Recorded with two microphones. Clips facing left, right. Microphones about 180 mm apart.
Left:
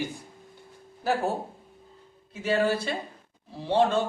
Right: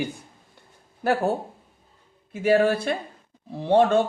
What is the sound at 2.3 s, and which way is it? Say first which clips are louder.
Speech: right 5 dB; 55° right (ahead or behind).